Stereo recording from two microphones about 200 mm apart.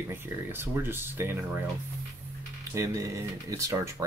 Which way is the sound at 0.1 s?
10° right (ahead or behind).